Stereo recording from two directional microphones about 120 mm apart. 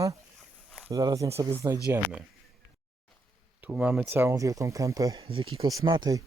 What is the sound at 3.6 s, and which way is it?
Speech, 10° right (ahead or behind).